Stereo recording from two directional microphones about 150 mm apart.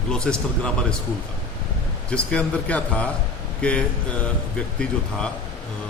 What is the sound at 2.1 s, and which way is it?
Speech, 10° left (ahead or behind).